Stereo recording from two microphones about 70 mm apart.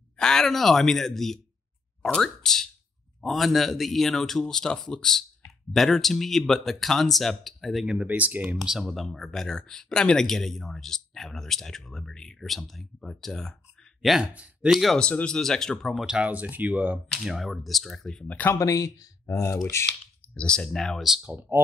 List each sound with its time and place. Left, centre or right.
0.2 s speech: centre; by 8.5 s right
8.5 s speech: centre
14.0 s speech: centre
14.3 s speech: centre
14.7 s speech: centre
15.0 s speech: centre
16.0 s speech: centre
17.2 s speech: centre
18.2 s speech: left
18.5 s speech: left
20.3 s speech: centre
21.2 s speech: centre